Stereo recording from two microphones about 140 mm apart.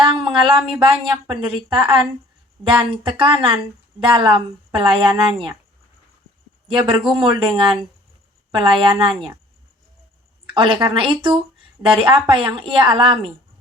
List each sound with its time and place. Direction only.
0.0 s speech: 35° right (ahead or behind)
6.7 s speech: 35° right (ahead or behind)
10.4 s a woman's voice: 40° right (ahead or behind)